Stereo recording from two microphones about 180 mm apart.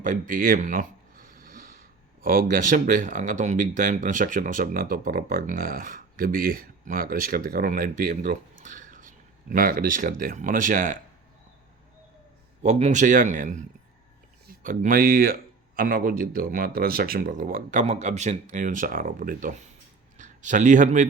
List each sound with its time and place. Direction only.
0.0 s a sound: 45° right (ahead or behind)
2.2 s speech: 50° right (ahead or behind)
12.6 s a man's voice: 40° right (ahead or behind)